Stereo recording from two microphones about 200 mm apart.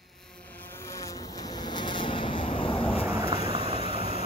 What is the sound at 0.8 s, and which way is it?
Vehicle, 15° left (ahead or behind).